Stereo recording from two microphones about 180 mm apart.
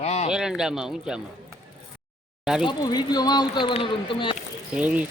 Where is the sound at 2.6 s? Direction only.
25° left (ahead or behind).